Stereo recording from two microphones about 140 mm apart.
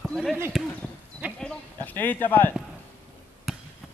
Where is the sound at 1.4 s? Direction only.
10° left (ahead or behind).